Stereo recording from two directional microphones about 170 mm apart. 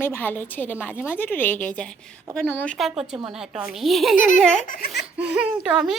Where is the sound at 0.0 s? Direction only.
10° left (ahead or behind).